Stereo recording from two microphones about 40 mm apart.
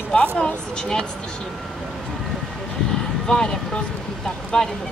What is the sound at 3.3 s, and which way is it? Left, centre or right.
Speech, centre.